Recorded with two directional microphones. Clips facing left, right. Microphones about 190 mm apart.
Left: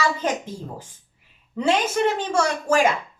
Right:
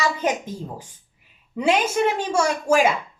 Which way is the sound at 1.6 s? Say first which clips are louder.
Right 1 dB; 10° right (ahead or behind).